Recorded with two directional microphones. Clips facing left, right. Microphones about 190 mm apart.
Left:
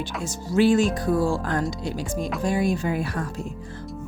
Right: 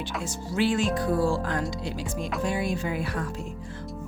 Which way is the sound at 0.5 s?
40° left (ahead or behind).